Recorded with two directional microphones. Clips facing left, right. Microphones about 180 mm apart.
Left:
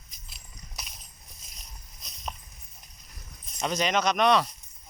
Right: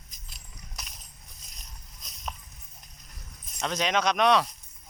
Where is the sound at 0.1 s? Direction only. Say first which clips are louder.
Right 1 dB; 40° right (ahead or behind).